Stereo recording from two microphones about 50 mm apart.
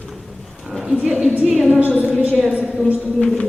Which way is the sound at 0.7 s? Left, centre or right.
Centre.